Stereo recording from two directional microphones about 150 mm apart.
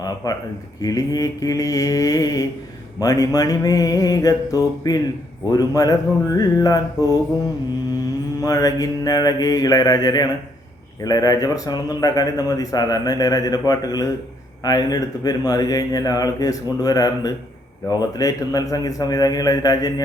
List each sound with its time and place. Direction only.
0.2 s speech: 25° left (ahead or behind)
8.4 s speech: 25° left (ahead or behind)